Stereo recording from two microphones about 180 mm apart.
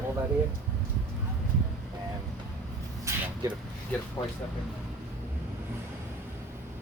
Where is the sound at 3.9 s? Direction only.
10° left (ahead or behind).